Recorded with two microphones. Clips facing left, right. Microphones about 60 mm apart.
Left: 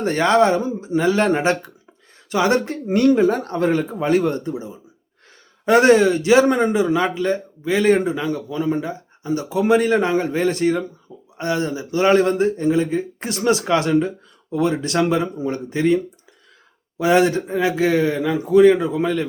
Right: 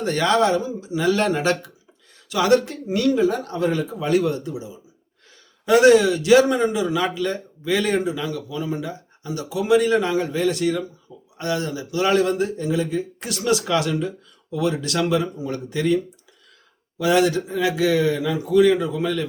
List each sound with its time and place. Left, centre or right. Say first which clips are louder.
0.0 s speech: left 3 dB; left
2.8 s speech: left 4 dB; left
17.0 s speech: left 2 dB; left